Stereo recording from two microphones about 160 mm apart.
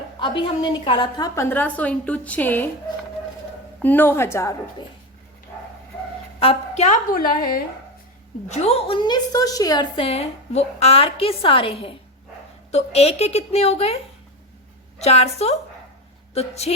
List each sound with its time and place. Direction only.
0.2 s a woman's voice: 30° left (ahead or behind)
1.5 s a woman's voice: 10° left (ahead or behind)
3.8 s a woman's voice: 10° left (ahead or behind)
6.4 s a woman's voice: 40° left (ahead or behind); by 7.6 s 60° left (ahead or behind)
8.4 s a woman's voice: 40° left (ahead or behind)